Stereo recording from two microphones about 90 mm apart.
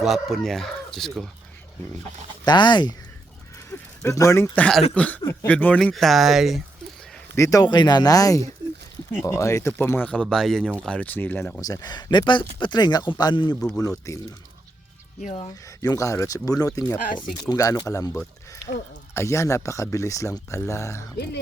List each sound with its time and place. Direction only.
0.0 s speech: centre (ahead or behind)
2.4 s speech: 55° left (ahead or behind)
3.7 s speech: 35° left (ahead or behind)
4.9 s speech: 15° left (ahead or behind)
5.2 s speech: 30° left (ahead or behind)
5.5 s speech: 15° left (ahead or behind)
5.9 s speech: centre (ahead or behind)
7.3 s speech: 35° left (ahead or behind)
7.6 s speech: 50° left (ahead or behind); by 9.8 s 30° left (ahead or behind)
9.8 s speech: 20° left (ahead or behind); by 10.7 s 5° left (ahead or behind)
10.8 s speech: 15° left (ahead or behind)
11.6 s speech: 45° left (ahead or behind)
13.7 s speech: 35° left (ahead or behind)
15.8 s speech: 40° left (ahead or behind)